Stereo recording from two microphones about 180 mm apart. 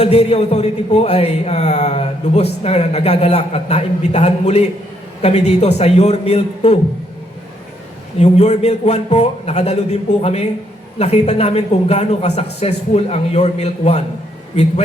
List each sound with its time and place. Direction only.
0.0 s a man's voice: 35° left (ahead or behind)
8.2 s a man's voice: 40° left (ahead or behind)